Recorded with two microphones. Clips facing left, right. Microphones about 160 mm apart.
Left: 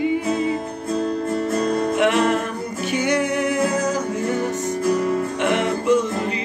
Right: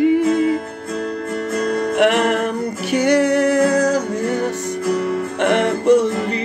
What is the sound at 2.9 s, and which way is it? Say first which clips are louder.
Music: right 6 dB; 40° right (ahead or behind).